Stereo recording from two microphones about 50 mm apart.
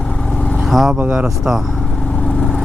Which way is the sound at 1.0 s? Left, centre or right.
Right.